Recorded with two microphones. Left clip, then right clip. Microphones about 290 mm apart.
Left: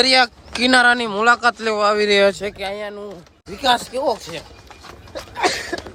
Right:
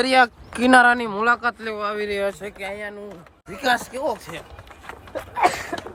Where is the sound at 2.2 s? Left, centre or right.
Left; by 4.4 s centre.